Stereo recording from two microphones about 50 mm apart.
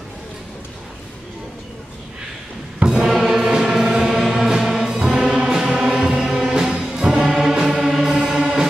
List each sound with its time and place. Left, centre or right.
2.8 s music: centre
3.1 s music: centre